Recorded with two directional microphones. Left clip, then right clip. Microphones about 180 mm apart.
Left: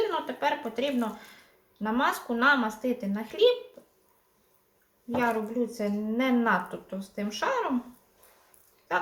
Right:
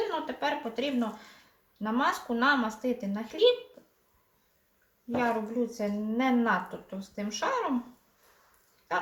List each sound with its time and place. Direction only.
0.1 s a woman's voice: 15° left (ahead or behind)
5.1 s a woman's voice: 15° left (ahead or behind)